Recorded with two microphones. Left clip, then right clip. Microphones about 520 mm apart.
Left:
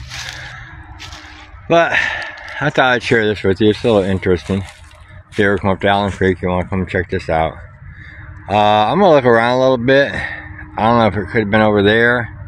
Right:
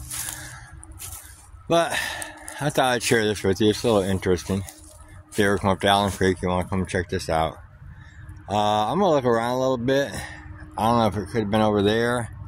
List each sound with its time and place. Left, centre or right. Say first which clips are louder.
1.7 s speech: left 9 dB; right